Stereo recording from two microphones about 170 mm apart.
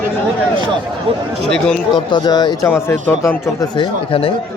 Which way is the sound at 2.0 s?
25° left (ahead or behind).